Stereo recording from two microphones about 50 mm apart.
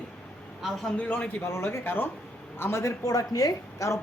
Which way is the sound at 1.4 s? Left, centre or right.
Left.